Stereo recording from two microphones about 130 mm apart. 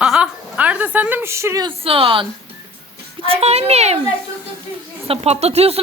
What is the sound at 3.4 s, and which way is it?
Speech, 55° right (ahead or behind).